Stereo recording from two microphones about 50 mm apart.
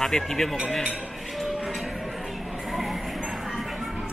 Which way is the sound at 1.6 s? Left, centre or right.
Centre.